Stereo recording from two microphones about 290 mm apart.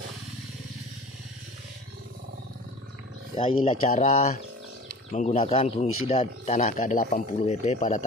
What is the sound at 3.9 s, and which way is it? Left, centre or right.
Speech, left.